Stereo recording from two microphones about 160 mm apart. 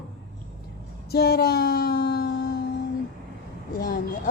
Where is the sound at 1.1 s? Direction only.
75° left (ahead or behind).